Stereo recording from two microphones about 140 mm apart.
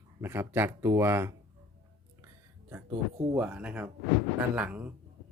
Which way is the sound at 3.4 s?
10° right (ahead or behind).